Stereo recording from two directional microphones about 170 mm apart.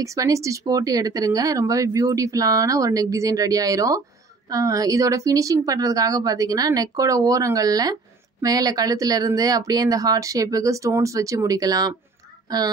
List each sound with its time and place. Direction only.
0.0 s speech: 20° right (ahead or behind)